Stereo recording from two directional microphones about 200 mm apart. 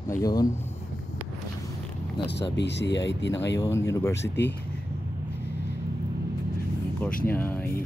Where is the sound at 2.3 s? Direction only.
60° left (ahead or behind).